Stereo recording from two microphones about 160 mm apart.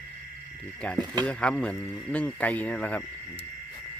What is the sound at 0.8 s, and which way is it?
Speech, 5° left (ahead or behind).